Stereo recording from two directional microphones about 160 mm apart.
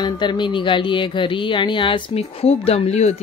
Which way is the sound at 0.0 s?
30° left (ahead or behind).